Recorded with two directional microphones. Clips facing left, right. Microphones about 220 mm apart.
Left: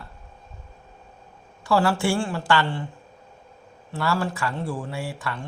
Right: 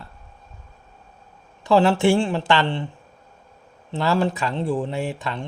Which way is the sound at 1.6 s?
20° right (ahead or behind).